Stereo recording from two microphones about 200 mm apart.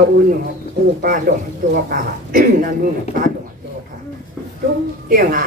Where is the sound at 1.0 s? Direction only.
45° right (ahead or behind).